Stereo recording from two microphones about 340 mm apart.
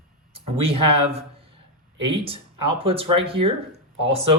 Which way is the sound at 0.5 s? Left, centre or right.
Centre.